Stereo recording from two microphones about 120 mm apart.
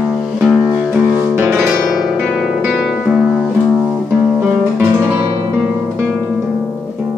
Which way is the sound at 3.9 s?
15° right (ahead or behind).